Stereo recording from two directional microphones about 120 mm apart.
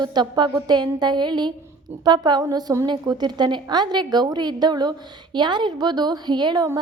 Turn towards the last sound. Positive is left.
turn(degrees=-40)  # may be behind; listen again after turning